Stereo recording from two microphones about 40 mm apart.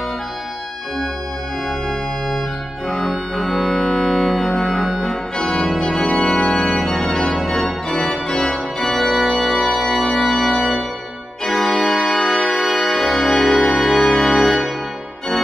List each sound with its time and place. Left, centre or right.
1.9 s organ: centre